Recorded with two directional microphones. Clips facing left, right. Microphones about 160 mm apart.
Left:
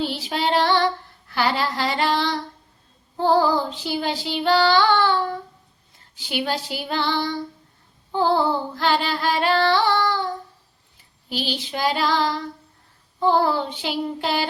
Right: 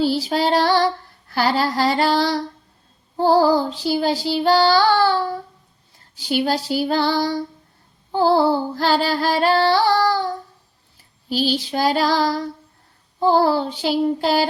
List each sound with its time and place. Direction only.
0.0 s female singing: 35° right (ahead or behind)
11.3 s female singing: 40° right (ahead or behind)